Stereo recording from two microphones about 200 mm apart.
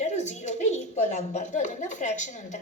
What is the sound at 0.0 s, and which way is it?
A woman's voice, 35° left (ahead or behind).